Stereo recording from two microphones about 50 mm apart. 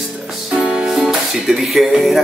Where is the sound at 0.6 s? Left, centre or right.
Right.